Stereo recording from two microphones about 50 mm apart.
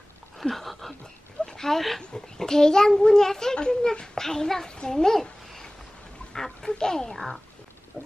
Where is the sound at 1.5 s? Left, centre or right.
Centre.